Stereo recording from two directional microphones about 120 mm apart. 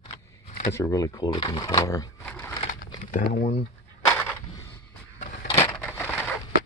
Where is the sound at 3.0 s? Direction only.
90° left.